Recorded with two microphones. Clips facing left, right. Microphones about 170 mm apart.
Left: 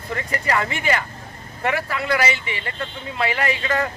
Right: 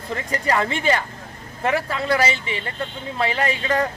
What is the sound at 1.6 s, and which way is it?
Speech, 25° right (ahead or behind).